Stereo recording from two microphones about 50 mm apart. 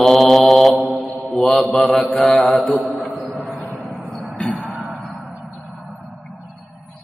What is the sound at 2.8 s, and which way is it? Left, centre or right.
Music, centre.